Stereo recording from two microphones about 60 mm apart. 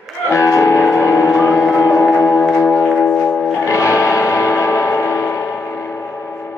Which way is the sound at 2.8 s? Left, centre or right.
Left.